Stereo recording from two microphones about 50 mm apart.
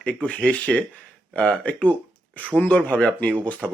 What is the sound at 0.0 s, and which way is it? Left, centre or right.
Speech, left.